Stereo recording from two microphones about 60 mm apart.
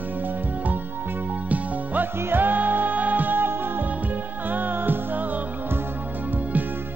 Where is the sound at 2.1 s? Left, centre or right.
Right.